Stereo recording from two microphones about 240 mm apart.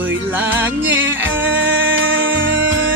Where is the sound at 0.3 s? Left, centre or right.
Centre.